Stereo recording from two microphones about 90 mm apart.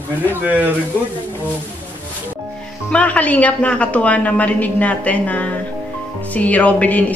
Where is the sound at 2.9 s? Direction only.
15° left (ahead or behind).